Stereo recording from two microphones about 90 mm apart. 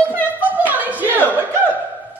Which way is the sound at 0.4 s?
20° right (ahead or behind).